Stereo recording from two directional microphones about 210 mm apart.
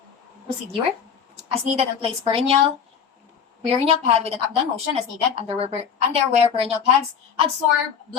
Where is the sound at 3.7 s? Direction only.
30° right (ahead or behind).